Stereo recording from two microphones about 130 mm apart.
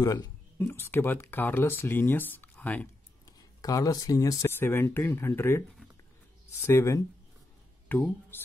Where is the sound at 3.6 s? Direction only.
25° left (ahead or behind).